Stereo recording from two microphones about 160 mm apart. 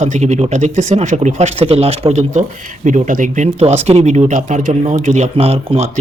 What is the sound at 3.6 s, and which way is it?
Speech, 40° right (ahead or behind).